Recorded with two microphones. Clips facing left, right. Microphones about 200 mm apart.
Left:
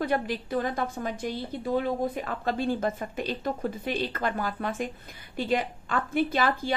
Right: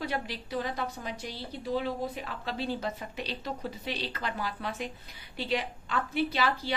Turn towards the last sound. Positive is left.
turn(degrees=50)  # may be behind; listen again after turning